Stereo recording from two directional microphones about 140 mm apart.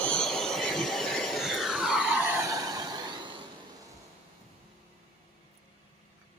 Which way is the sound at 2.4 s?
25° right (ahead or behind).